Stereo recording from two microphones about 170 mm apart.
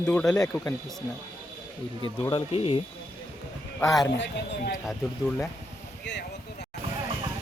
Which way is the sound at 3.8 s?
Centre (ahead or behind).